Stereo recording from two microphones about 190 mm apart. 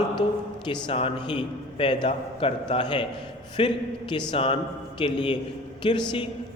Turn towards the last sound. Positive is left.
turn(degrees=25)  # may be behind; listen again after turning